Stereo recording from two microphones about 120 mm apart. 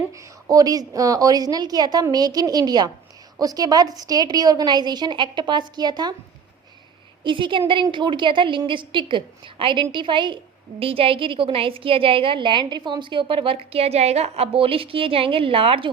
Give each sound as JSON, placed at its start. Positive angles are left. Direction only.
{"t": 0.4, "sound": "a woman's voice", "side_deg": -30}
{"t": 7.3, "sound": "a woman's voice", "side_deg": -45}
{"t": 13.7, "sound": "a woman's voice", "side_deg": -60}